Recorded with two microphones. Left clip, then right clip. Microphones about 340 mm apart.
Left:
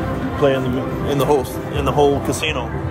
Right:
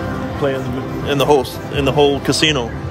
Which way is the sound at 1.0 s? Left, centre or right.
Centre.